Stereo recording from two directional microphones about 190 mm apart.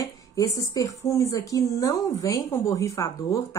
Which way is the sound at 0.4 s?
15° left (ahead or behind).